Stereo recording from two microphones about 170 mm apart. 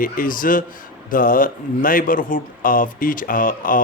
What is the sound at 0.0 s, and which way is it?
A man's voice, 55° left (ahead or behind).